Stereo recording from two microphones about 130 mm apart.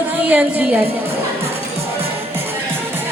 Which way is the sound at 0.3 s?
10° right (ahead or behind).